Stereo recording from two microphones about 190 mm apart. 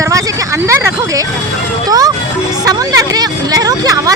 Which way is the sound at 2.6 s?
20° right (ahead or behind).